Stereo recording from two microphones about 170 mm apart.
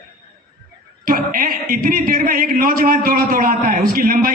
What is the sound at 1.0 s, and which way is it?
A man's voice, 55° right (ahead or behind).